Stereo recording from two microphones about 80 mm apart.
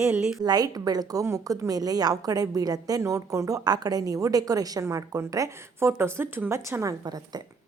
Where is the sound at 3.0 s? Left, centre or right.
Right.